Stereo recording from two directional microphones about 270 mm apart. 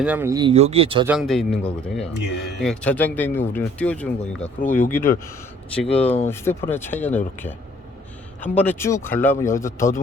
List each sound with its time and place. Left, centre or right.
0.0 s speech: centre
1.0 s speech: centre